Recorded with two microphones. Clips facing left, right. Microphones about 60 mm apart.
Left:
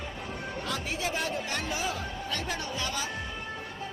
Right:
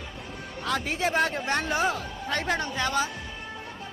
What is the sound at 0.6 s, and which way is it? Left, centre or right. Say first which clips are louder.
Music: right 8 dB; right.